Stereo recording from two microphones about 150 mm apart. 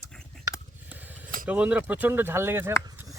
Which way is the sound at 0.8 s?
10° right (ahead or behind).